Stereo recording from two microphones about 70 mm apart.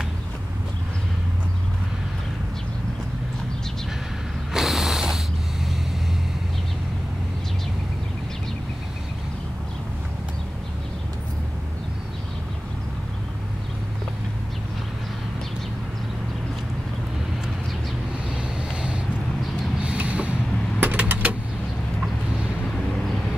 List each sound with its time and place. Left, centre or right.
4.6 s mechanisms: centre
18.3 s boat: centre
20.8 s vehicle: right